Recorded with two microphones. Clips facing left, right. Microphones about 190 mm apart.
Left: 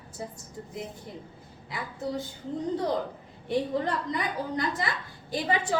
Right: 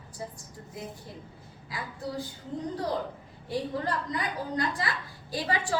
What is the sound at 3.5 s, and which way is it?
A woman's voice, 25° left (ahead or behind).